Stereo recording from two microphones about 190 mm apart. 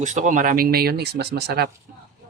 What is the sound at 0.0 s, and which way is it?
Speech, 40° right (ahead or behind).